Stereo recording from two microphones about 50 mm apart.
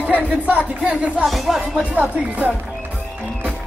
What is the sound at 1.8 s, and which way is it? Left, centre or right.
Speech, right.